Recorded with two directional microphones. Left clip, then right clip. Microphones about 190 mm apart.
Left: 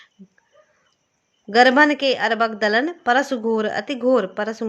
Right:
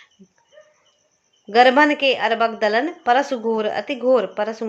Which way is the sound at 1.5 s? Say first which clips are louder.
Even; 30° left (ahead or behind).